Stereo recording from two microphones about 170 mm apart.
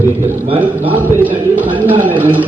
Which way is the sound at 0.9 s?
10° right (ahead or behind).